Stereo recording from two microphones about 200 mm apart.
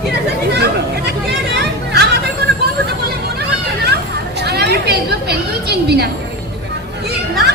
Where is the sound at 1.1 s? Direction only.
55° right (ahead or behind).